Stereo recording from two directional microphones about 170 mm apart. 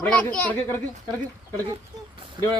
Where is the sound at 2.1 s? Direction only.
25° right (ahead or behind).